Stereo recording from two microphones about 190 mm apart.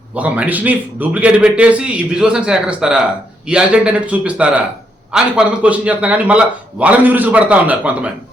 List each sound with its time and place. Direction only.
0.2 s a man's voice: 5° right (ahead or behind)